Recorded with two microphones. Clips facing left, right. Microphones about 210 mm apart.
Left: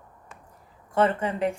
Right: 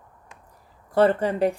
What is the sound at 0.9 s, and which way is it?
Speech, 35° right (ahead or behind).